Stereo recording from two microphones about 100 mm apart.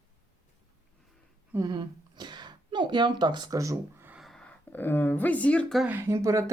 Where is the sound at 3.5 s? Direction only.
35° right (ahead or behind).